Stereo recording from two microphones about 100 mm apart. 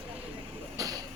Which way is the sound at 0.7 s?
35° right (ahead or behind).